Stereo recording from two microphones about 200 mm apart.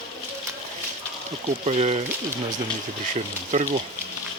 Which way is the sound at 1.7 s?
35° right (ahead or behind).